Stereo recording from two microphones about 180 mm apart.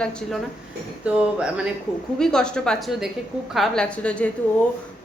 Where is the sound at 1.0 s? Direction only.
5° right (ahead or behind).